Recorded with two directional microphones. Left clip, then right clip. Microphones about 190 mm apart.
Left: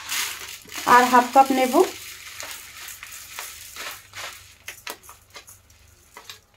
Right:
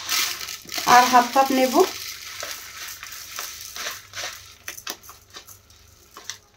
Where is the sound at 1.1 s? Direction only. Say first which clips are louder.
Right 1 dB; 35° left (ahead or behind).